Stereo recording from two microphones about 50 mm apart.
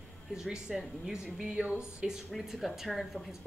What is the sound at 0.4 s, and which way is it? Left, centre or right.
A woman's voice, centre.